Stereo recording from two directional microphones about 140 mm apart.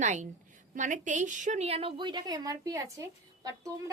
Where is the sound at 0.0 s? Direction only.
60° right (ahead or behind).